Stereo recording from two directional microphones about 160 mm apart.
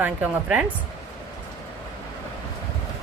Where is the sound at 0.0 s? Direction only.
10° right (ahead or behind).